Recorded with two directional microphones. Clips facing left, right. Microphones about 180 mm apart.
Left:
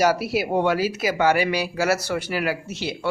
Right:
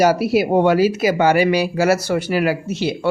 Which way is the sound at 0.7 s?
25° right (ahead or behind).